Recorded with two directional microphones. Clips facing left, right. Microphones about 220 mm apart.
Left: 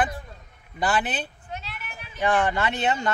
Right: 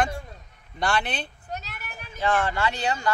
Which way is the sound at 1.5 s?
40° right (ahead or behind).